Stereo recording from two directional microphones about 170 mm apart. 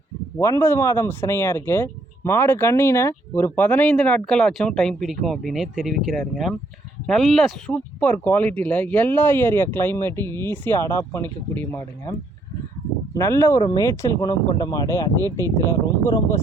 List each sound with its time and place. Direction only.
0.3 s speech: 15° left (ahead or behind)
13.1 s speech: 15° left (ahead or behind)
15.2 s speech: 20° right (ahead or behind)
16.0 s speech: 20° left (ahead or behind)